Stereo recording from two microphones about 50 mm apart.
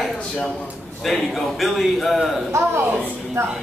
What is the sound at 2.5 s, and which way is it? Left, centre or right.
Speech, right.